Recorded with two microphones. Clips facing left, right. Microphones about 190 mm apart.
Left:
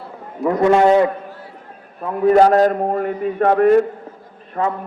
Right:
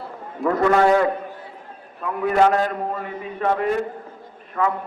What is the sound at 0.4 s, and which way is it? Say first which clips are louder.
Speech: left 4 dB; 20° left (ahead or behind).